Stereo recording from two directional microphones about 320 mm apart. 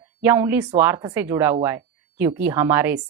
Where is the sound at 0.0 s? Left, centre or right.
Centre.